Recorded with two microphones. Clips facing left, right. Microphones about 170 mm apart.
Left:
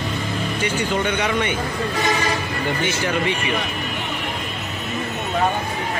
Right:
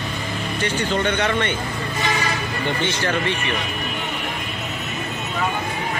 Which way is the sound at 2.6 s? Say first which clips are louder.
Right 1 dB; 5° left (ahead or behind).